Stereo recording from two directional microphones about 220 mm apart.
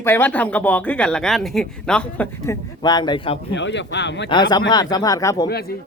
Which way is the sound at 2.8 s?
20° left (ahead or behind).